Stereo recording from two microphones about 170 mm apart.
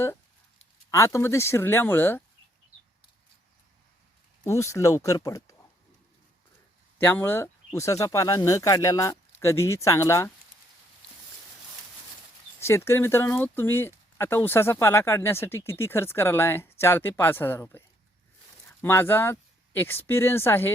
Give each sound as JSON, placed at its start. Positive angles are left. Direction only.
{"t": 0.9, "sound": "speech", "side_deg": 20}
{"t": 4.4, "sound": "speech", "side_deg": 15}
{"t": 7.0, "sound": "speech", "side_deg": 15}
{"t": 12.5, "sound": "speech", "side_deg": 15}